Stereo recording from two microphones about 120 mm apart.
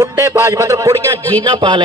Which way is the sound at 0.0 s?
20° right (ahead or behind).